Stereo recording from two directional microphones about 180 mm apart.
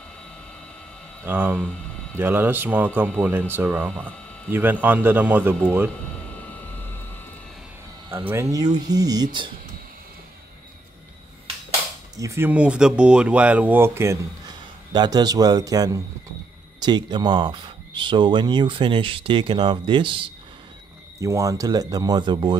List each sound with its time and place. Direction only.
1.2 s speech: 10° right (ahead or behind)
6.5 s vehicle: 10° left (ahead or behind)
8.3 s speech: 15° right (ahead or behind)
12.2 s speech: 15° right (ahead or behind)
21.2 s speech: 20° right (ahead or behind)